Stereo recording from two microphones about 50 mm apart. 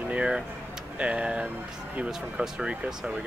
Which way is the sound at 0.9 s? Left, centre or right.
Right.